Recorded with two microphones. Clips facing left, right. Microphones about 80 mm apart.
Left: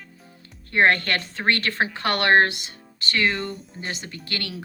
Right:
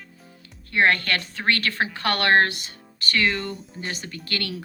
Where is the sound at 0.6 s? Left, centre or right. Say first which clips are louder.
Left 1 dB; left.